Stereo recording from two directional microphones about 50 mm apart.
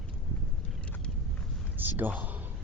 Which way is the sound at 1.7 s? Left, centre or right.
Right.